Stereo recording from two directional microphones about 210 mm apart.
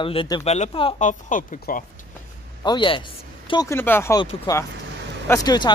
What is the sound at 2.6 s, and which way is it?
Speech, 25° left (ahead or behind).